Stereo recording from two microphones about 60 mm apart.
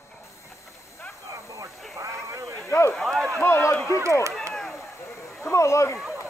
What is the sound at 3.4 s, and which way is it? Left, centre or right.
Run, left.